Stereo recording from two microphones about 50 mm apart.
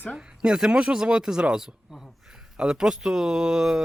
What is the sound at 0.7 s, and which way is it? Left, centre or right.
Speech, right.